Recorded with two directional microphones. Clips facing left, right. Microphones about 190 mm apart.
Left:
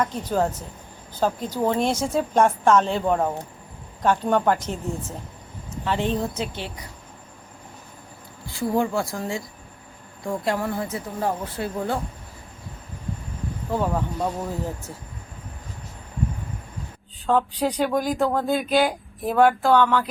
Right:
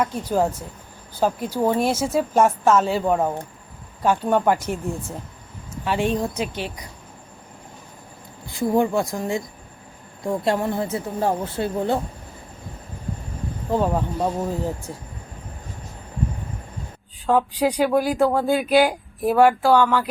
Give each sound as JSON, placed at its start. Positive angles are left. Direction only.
{"t": 0.0, "sound": "speech", "side_deg": -10}
{"t": 8.5, "sound": "speech", "side_deg": -20}
{"t": 13.7, "sound": "speech", "side_deg": -20}
{"t": 17.2, "sound": "speech", "side_deg": -10}